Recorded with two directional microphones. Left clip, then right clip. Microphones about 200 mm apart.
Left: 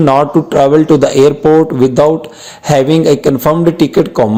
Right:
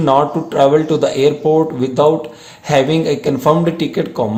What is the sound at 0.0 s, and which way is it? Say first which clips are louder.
A man's voice: left 4 dB; 35° left (ahead or behind).